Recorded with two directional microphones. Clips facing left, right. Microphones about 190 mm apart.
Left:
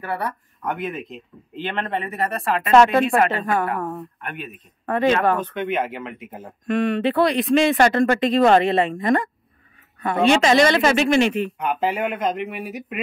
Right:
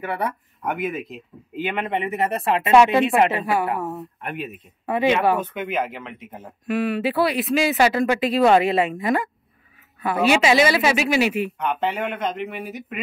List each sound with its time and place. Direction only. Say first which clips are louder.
0.0 s speech: right 1 dB; 20° right (ahead or behind)
0.3 s speech: even; 5° right (ahead or behind)
2.0 s speech: right 2 dB; 20° right (ahead or behind)
2.7 s speech: left 1 dB; 10° right (ahead or behind)
6.6 s speech: left 2 dB; 5° right (ahead or behind)
11.5 s speech: left 1 dB; 5° left (ahead or behind)